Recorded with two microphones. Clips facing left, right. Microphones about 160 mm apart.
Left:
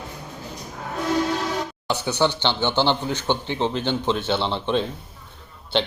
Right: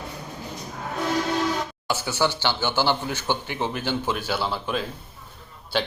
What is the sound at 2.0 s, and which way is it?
A man's voice, 20° left (ahead or behind).